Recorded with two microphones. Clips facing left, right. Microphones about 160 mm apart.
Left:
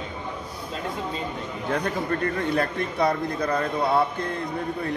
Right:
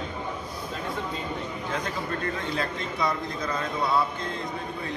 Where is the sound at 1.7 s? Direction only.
60° left (ahead or behind).